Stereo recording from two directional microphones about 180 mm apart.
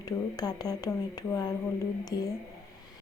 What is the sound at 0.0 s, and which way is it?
Speech, 20° left (ahead or behind).